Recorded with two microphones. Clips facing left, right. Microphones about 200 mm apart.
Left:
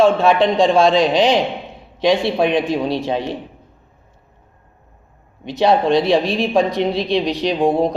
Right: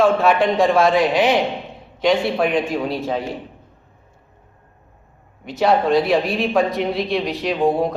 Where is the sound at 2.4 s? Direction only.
75° left (ahead or behind).